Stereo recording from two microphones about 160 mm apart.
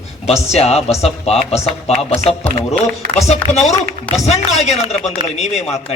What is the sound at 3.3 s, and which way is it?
A man's voice, 45° left (ahead or behind).